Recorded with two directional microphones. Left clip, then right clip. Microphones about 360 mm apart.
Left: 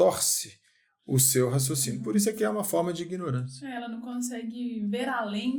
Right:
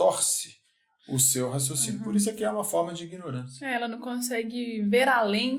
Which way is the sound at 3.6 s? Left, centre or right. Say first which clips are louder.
Right 11 dB; right.